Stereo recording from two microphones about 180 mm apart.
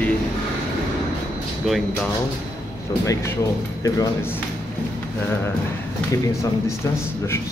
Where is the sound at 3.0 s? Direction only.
20° left (ahead or behind).